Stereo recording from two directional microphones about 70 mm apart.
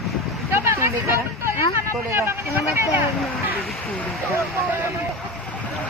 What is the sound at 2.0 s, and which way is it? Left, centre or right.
Speech, right.